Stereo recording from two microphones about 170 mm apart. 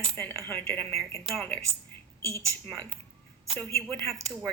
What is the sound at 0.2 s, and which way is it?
Speech, 10° left (ahead or behind).